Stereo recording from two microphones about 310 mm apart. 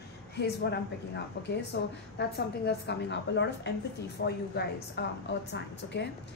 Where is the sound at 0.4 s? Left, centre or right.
Left.